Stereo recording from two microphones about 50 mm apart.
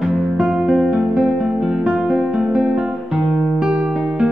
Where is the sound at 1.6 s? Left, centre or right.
Centre.